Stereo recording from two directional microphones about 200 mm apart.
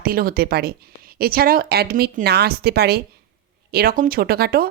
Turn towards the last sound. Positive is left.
turn(degrees=-50)  # may be behind; listen again after turning